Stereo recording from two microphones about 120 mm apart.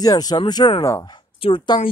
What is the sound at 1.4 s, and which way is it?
Speech, 50° left (ahead or behind).